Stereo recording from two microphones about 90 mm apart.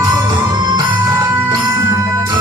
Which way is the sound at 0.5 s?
50° right (ahead or behind).